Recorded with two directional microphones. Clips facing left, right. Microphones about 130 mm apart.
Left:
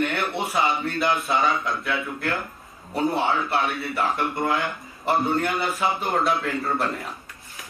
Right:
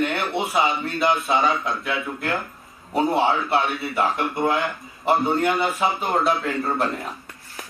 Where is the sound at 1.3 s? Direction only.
Centre (ahead or behind).